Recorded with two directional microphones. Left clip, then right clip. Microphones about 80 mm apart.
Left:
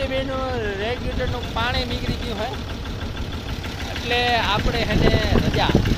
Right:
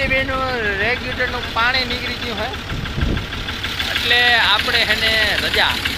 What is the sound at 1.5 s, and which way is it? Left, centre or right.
Speech, right.